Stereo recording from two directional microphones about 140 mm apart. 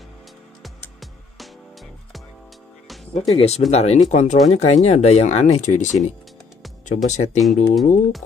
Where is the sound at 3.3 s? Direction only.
50° left (ahead or behind).